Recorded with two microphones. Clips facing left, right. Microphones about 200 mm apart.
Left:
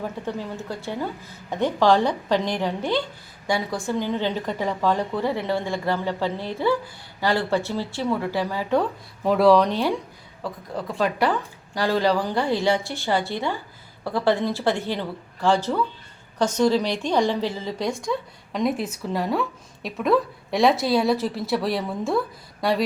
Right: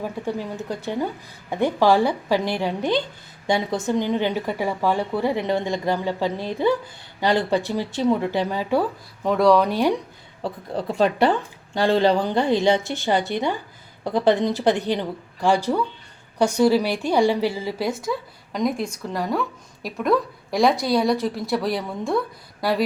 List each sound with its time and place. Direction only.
0.0 s speech: 15° right (ahead or behind)
9.2 s a woman's voice: 5° left (ahead or behind)
9.6 s speech: 15° right (ahead or behind)
10.4 s a woman's voice: 30° right (ahead or behind); by 22.8 s centre (ahead or behind)